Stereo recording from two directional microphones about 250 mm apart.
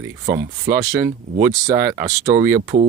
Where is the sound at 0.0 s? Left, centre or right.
Right.